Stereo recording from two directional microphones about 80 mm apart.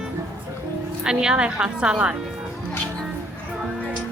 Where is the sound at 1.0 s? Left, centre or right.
Centre.